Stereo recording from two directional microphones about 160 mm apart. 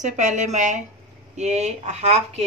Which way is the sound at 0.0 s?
50° right (ahead or behind).